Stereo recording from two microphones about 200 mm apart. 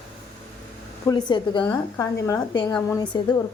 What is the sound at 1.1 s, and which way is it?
A woman's voice, 20° left (ahead or behind).